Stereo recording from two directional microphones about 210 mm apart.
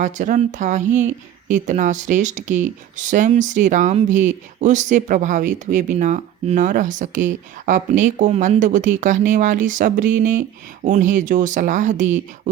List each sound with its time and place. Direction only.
0.0 s speech: 35° right (ahead or behind)